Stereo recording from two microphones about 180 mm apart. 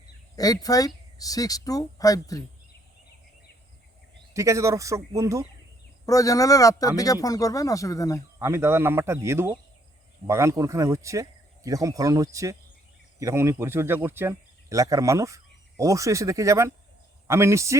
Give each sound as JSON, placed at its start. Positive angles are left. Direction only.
{"t": 0.3, "sound": "speech", "side_deg": 20}
{"t": 4.4, "sound": "speech", "side_deg": -15}
{"t": 6.1, "sound": "speech", "side_deg": 20}
{"t": 8.4, "sound": "speech", "side_deg": -15}